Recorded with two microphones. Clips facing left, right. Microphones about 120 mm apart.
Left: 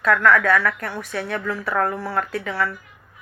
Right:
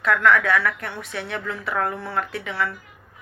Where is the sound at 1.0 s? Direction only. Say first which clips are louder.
Left 5 dB; 25° right (ahead or behind).